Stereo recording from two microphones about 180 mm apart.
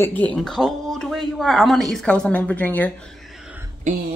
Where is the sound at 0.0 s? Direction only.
5° left (ahead or behind).